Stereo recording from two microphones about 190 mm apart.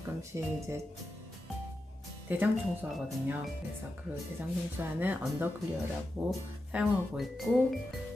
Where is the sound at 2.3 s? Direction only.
10° right (ahead or behind).